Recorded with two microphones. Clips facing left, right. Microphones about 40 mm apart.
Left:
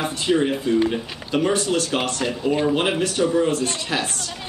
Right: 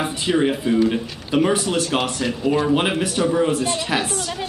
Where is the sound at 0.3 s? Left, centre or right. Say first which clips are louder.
Right 1 dB; centre.